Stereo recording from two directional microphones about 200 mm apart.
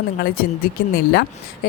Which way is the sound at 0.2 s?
50° left (ahead or behind).